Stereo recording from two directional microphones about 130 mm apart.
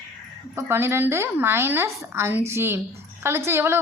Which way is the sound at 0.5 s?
20° right (ahead or behind).